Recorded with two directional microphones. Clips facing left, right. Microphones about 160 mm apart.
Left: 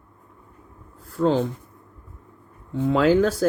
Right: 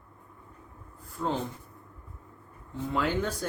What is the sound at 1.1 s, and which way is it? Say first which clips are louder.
Speech: left 11 dB; 90° left.